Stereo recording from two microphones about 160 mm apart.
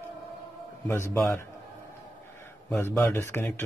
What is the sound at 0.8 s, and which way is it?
Speech, 15° left (ahead or behind).